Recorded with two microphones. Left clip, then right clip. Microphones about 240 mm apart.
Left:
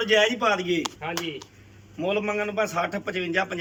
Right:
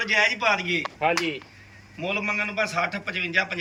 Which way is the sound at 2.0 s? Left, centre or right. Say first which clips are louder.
Even; centre.